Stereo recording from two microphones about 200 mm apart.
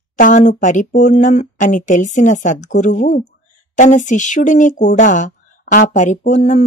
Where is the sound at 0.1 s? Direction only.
40° left (ahead or behind).